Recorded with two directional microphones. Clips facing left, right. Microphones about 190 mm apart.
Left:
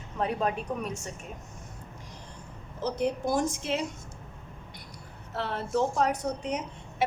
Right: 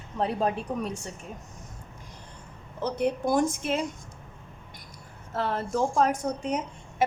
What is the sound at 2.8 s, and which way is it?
A woman's voice, 55° right (ahead or behind).